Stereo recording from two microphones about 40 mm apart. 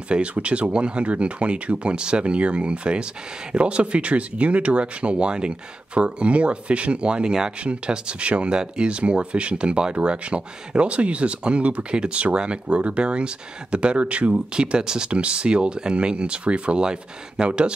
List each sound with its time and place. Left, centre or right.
0.1 s speech: right
14.5 s speech: right